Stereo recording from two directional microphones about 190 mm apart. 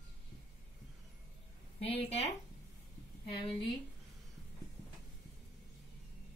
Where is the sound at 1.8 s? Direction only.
30° left (ahead or behind).